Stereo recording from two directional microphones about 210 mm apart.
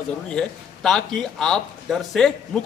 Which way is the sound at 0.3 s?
5° left (ahead or behind).